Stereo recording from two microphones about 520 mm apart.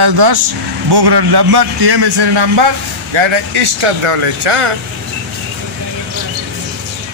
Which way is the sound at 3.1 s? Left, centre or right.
Right.